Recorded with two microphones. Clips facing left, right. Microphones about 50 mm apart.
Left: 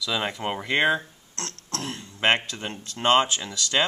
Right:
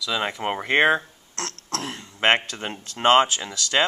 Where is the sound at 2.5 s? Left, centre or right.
Right.